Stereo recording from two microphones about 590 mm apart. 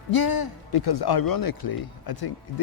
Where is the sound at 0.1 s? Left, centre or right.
Left.